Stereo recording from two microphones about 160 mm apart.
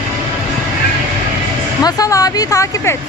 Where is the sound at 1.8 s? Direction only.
20° left (ahead or behind).